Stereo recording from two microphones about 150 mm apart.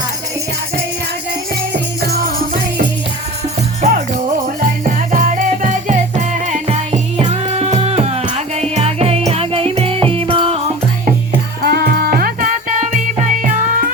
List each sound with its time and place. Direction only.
3.8 s music: 50° right (ahead or behind)
4.9 s music: 65° right (ahead or behind); by 10.6 s 35° right (ahead or behind)
11.6 s music: 90° right; by 13.5 s 60° right (ahead or behind)